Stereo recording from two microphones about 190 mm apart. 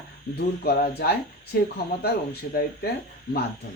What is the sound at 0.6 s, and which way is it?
Speech, 55° left (ahead or behind).